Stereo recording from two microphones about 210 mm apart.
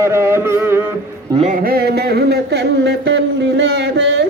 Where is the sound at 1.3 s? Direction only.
35° right (ahead or behind).